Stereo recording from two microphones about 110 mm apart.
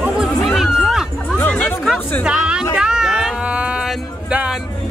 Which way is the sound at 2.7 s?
5° right (ahead or behind).